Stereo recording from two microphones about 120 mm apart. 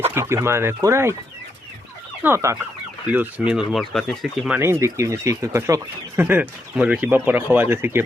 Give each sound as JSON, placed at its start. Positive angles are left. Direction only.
{"t": 0.1, "sound": "speech", "side_deg": -20}
{"t": 2.2, "sound": "speech", "side_deg": -25}
{"t": 3.1, "sound": "speech", "side_deg": -10}
{"t": 4.6, "sound": "speech", "side_deg": -20}